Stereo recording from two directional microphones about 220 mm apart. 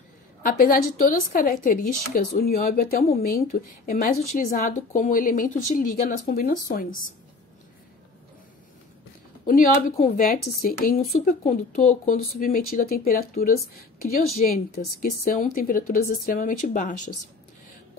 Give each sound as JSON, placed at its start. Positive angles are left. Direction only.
{"t": 0.5, "sound": "speech", "side_deg": 40}
{"t": 9.5, "sound": "speech", "side_deg": 40}